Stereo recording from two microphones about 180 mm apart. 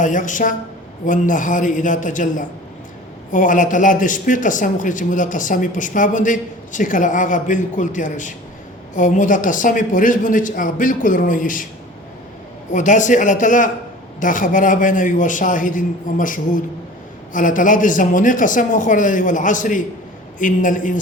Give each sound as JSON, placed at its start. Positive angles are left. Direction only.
{"t": 0.0, "sound": "a man's voice", "side_deg": 45}
{"t": 12.7, "sound": "a man's voice", "side_deg": 45}